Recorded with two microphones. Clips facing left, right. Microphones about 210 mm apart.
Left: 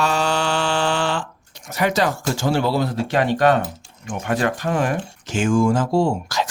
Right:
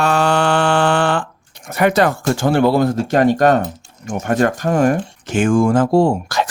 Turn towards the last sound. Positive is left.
turn(degrees=-55)  # may be behind; listen again after turning